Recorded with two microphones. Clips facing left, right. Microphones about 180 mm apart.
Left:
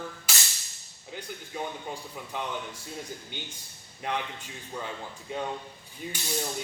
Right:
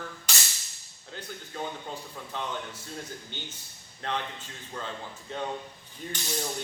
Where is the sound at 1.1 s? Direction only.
10° left (ahead or behind).